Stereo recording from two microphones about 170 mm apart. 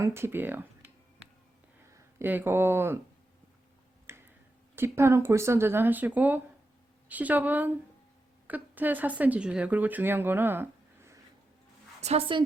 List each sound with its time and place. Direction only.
0.0 s speech: 15° right (ahead or behind)
1.9 s speech: 15° right (ahead or behind)
4.1 s a sound: 15° right (ahead or behind)
4.7 s speech: 15° right (ahead or behind)
11.9 s a woman's voice: 40° right (ahead or behind)